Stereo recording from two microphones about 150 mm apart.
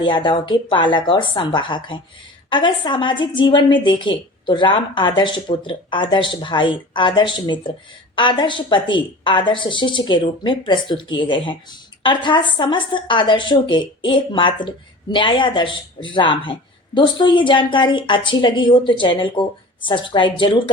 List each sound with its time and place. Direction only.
0.0 s speech: 35° left (ahead or behind)